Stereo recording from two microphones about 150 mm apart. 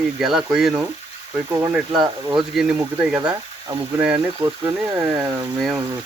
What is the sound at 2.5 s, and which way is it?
Speech, centre (ahead or behind).